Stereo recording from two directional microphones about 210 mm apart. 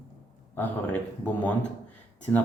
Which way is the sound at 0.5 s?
10° left (ahead or behind).